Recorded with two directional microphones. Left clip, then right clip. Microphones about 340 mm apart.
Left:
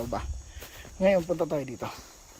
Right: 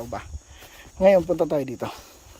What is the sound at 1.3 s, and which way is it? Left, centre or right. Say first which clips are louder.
Speech: right 6 dB; right.